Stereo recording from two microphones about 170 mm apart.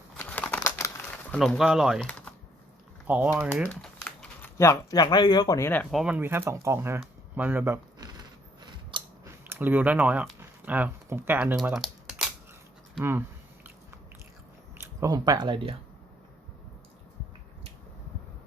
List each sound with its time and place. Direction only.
0.2 s crumpling: 10° left (ahead or behind)
1.3 s speech: centre (ahead or behind)
2.0 s typing: 10° left (ahead or behind)
3.1 s speech: 10° right (ahead or behind)
3.7 s speech: 5° left (ahead or behind); by 7.0 s 15° right (ahead or behind)
7.0 s a sound: 10° right (ahead or behind)
8.6 s scissors: 25° right (ahead or behind)
9.5 s speech: 10° right (ahead or behind)
11.5 s typing: centre (ahead or behind)
13.0 s speech: 15° right (ahead or behind)
14.8 s speech: 20° right (ahead or behind)